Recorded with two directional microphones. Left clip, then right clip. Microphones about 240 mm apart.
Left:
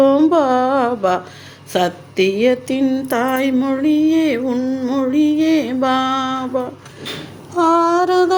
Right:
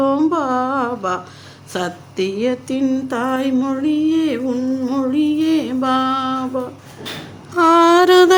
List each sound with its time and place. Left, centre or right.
0.0 s music: centre
1.7 s a sound: centre
7.5 s mantra: centre